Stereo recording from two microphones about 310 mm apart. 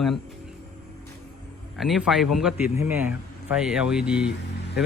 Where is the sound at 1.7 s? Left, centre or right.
Centre.